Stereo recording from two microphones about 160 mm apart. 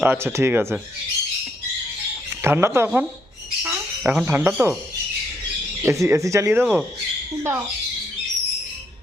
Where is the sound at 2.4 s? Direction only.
15° right (ahead or behind).